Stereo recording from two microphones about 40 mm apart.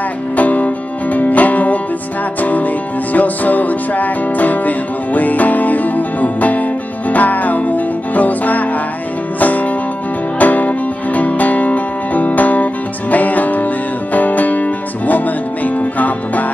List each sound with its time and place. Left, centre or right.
0.4 s music: left